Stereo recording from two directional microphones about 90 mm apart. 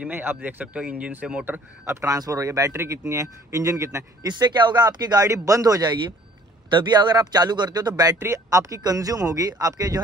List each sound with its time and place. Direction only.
0.0 s speech: 20° right (ahead or behind)
1.4 s speech: 25° right (ahead or behind)
2.7 s speech: 25° right (ahead or behind)
3.1 s speech: 35° right (ahead or behind)
4.3 s speech: 55° right (ahead or behind)